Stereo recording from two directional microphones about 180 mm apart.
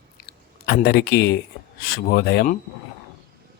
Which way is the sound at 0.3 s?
60° left (ahead or behind).